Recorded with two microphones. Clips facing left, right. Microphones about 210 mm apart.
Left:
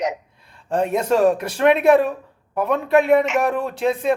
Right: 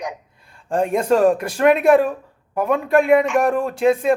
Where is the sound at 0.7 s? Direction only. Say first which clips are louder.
Right 1 dB; 5° left (ahead or behind).